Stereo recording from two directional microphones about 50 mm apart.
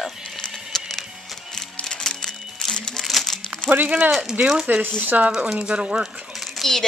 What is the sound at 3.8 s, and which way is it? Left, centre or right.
Speech, right.